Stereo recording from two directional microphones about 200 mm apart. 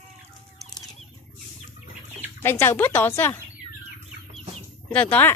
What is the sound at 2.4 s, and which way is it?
Speech, 10° left (ahead or behind).